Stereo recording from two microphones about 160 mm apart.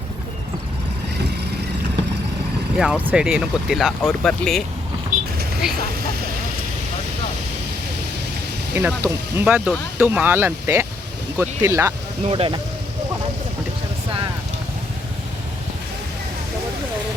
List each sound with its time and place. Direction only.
2.7 s speech: centre (ahead or behind)
5.6 s speech: 5° right (ahead or behind)
8.7 s speech: 15° right (ahead or behind)
12.2 s speech: 35° right (ahead or behind)